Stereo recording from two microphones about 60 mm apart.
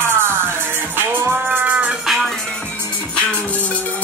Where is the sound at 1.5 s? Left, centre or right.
Right.